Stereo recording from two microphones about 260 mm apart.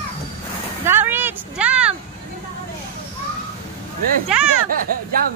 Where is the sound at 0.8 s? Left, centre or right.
Centre.